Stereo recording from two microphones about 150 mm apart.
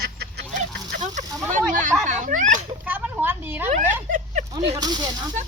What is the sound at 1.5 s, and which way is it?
Speech, 60° right (ahead or behind).